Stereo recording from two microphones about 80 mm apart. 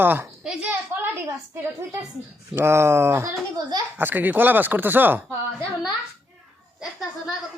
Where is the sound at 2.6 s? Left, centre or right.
Right.